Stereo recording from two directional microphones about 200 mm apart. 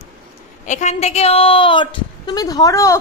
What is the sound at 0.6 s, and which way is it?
A woman's voice, 35° left (ahead or behind).